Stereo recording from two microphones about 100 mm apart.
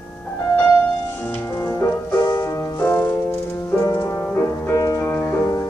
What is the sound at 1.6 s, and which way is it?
Music, 30° left (ahead or behind).